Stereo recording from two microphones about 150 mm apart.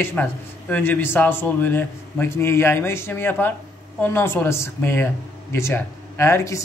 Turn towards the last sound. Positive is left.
turn(degrees=20)  # may be behind; listen again after turning